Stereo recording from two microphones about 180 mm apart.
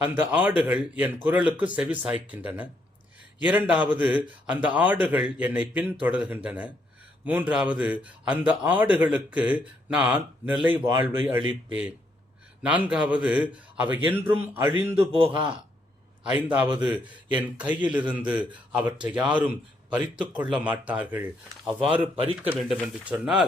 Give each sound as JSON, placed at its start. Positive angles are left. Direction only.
{"t": 0.0, "sound": "a man's voice", "side_deg": -10}
{"t": 14.9, "sound": "a man's voice", "side_deg": -30}
{"t": 16.2, "sound": "a man's voice", "side_deg": -10}
{"t": 23.0, "sound": "a man's voice", "side_deg": -5}